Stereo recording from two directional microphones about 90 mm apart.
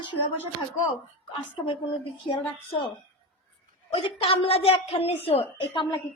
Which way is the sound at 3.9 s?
90° left.